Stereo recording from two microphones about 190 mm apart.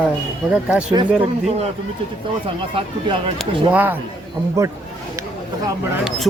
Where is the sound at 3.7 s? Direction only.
10° right (ahead or behind).